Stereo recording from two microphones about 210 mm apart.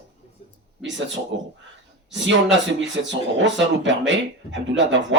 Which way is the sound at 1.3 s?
65° right (ahead or behind).